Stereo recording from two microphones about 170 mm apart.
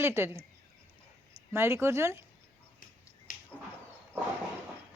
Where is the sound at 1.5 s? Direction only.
15° right (ahead or behind).